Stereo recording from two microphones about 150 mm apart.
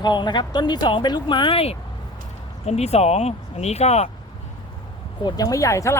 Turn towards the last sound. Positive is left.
turn(degrees=20)  # may be behind; listen again after turning